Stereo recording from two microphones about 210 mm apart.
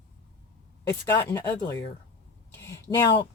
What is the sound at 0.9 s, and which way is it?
Speech, 15° left (ahead or behind).